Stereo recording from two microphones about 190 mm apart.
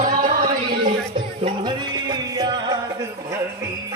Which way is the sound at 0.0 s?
45° right (ahead or behind).